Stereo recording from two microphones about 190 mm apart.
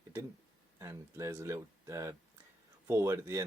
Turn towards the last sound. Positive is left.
turn(degrees=-15)  # may be behind; listen again after turning